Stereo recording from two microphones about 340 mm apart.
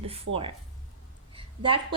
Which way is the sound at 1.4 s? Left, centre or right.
Centre.